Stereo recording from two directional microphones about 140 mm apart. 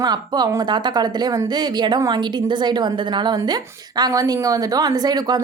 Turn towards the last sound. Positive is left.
turn(degrees=-30)  # may be behind; listen again after turning